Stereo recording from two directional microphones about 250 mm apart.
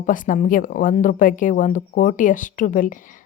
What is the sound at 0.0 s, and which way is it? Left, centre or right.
Speech, left.